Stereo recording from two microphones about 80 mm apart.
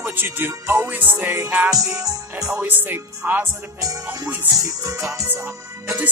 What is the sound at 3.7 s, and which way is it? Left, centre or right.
Music, right.